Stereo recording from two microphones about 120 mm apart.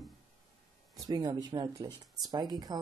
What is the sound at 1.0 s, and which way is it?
Speech, 30° right (ahead or behind).